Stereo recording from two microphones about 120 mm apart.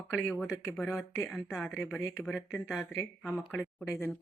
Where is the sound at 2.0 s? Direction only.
20° left (ahead or behind).